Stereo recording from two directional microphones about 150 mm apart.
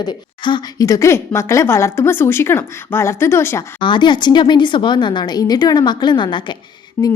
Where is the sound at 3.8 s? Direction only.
30° left (ahead or behind).